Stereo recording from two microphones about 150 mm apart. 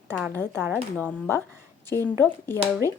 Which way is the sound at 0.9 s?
10° left (ahead or behind).